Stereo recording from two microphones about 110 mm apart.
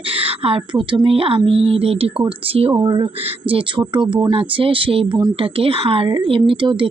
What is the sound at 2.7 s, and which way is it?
Speech, 40° right (ahead or behind).